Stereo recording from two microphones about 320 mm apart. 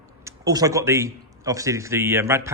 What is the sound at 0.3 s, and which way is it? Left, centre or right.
Speech, centre.